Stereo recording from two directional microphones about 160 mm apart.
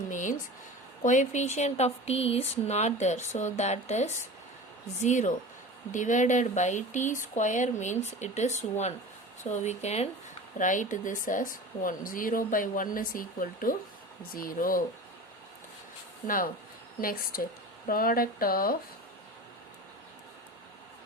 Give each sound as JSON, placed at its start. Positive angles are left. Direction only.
{"t": 0.1, "sound": "a sound", "side_deg": 50}
{"t": 1.0, "sound": "a woman's voice", "side_deg": 50}
{"t": 16.2, "sound": "a woman's voice", "side_deg": 60}